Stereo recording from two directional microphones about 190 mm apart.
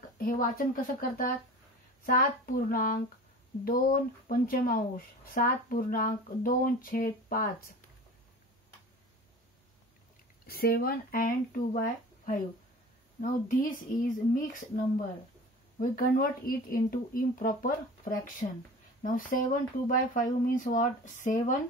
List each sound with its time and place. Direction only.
0.2 s speech: 50° left (ahead or behind)
10.4 s speech: 55° left (ahead or behind)
15.8 s speech: 50° left (ahead or behind)